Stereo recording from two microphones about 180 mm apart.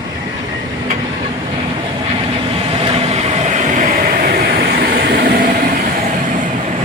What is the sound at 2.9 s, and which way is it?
Vehicle, 35° right (ahead or behind).